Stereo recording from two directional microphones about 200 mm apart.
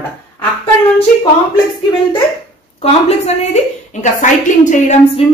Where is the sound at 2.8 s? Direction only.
30° left (ahead or behind).